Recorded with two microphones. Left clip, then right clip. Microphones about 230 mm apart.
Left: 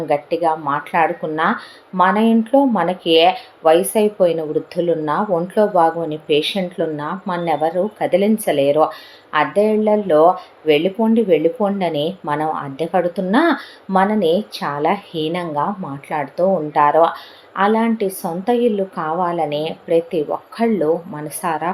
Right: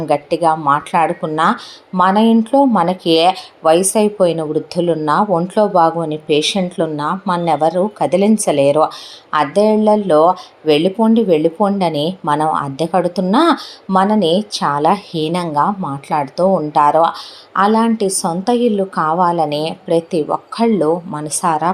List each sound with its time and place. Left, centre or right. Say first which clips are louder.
0.0 s speech: right 3 dB; right